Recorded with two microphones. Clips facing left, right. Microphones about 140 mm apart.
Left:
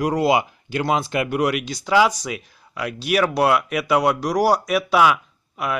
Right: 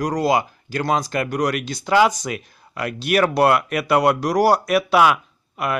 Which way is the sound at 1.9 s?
5° right (ahead or behind).